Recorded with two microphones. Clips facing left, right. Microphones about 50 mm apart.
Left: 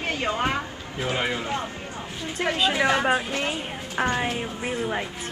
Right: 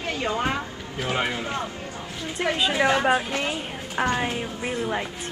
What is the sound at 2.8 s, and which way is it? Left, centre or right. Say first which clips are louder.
Speech: right 2 dB; left.